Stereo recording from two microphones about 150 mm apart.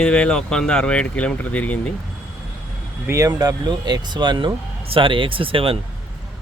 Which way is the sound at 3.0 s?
20° right (ahead or behind).